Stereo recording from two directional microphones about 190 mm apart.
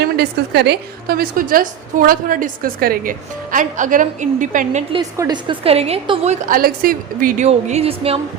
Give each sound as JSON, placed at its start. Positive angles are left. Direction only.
{"t": 0.0, "sound": "a woman's voice", "side_deg": -60}
{"t": 4.9, "sound": "a woman's voice", "side_deg": -20}